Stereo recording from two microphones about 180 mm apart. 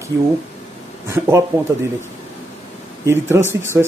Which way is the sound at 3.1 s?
15° right (ahead or behind).